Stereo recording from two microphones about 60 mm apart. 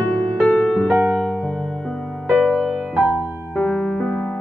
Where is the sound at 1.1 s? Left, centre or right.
Centre.